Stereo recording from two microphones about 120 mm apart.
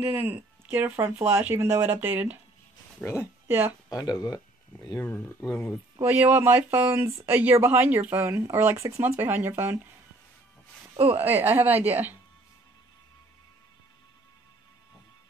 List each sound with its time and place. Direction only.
0.0 s speech: 15° right (ahead or behind)
3.0 s speech: 5° left (ahead or behind)
3.4 s speech: 15° right (ahead or behind)
3.9 s speech: 35° left (ahead or behind)
4.9 s speech: 15° left (ahead or behind)
6.0 s speech: 15° right (ahead or behind)
11.1 s speech: 15° right (ahead or behind)